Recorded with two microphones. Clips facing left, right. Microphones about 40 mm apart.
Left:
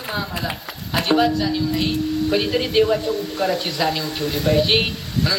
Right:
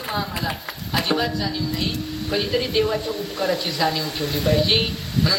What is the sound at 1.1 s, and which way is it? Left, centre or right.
A woman's voice, centre.